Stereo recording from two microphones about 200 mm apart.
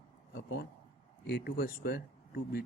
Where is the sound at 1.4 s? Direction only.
45° left (ahead or behind).